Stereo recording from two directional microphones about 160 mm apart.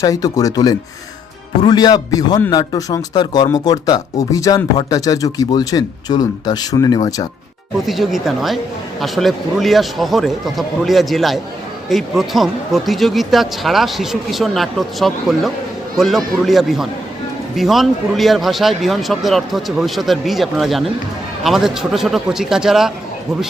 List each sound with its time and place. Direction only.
0.0 s speech: 20° left (ahead or behind)
7.9 s speech: centre (ahead or behind)